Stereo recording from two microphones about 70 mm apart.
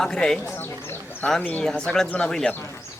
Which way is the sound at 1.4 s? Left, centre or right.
Left.